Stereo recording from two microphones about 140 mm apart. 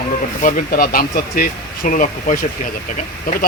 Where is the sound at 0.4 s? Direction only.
85° left.